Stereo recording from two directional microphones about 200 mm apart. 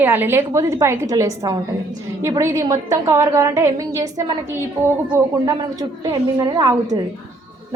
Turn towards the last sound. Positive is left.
turn(degrees=-20)  # may be behind; listen again after turning